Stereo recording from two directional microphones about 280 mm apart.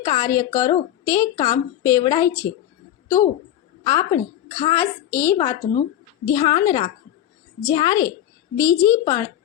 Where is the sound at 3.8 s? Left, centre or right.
Centre.